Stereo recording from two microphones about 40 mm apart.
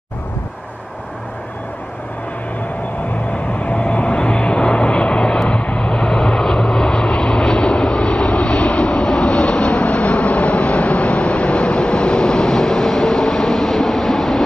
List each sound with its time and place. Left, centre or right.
3.5 s vehicle: left; by 14.4 s centre